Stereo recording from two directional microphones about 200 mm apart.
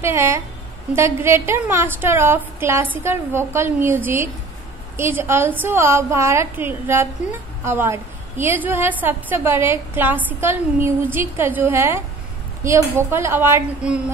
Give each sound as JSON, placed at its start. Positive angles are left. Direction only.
{"t": 0.0, "sound": "a woman's voice", "side_deg": -15}